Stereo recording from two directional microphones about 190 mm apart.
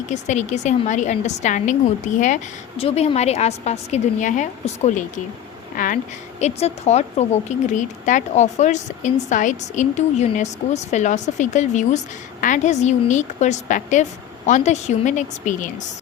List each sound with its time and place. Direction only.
0.1 s a woman's voice: 40° left (ahead or behind)
6.4 s a woman's voice: 35° left (ahead or behind)